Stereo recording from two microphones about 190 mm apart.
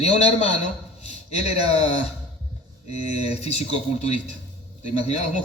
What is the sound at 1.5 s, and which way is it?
Speech, 35° left (ahead or behind).